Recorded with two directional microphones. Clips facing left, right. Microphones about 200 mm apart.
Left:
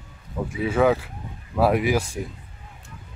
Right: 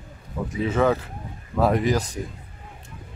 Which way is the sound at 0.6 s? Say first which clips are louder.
Left 1 dB; 10° left (ahead or behind).